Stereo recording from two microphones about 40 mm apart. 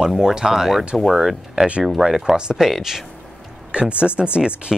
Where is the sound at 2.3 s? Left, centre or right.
Right.